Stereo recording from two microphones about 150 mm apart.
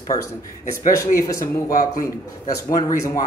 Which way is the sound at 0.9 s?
20° left (ahead or behind).